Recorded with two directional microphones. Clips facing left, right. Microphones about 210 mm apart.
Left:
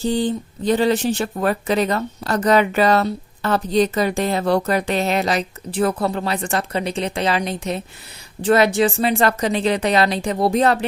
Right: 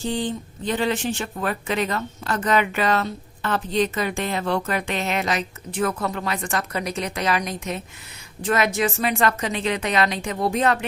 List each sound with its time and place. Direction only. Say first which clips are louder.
0.0 s speech: left 5 dB; 35° left (ahead or behind)